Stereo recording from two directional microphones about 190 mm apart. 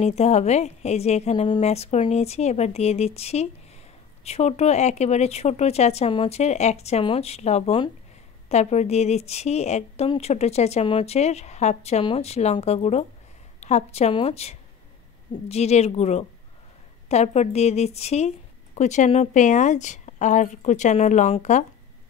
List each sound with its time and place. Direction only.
0.0 s speech: 35° left (ahead or behind)